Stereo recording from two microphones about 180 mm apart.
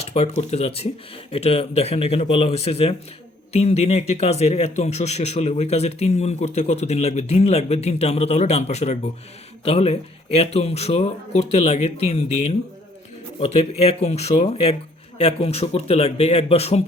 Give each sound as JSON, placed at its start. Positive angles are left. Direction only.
{"t": 0.0, "sound": "speech", "side_deg": 35}